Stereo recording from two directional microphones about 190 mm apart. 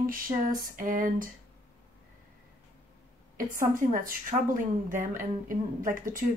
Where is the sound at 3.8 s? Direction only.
45° right (ahead or behind).